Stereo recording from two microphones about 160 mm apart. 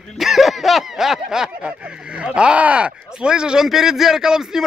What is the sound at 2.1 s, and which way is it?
Speech, 5° right (ahead or behind).